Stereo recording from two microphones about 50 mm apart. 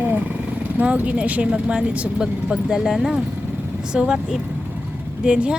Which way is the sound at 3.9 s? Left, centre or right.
Centre.